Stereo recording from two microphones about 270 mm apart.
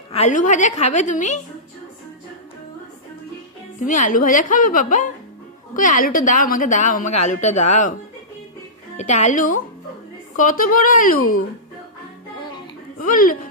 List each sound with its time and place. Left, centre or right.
0.1 s a woman's voice: left
3.8 s a woman's voice: left
9.0 s a woman's voice: left
13.1 s speech: left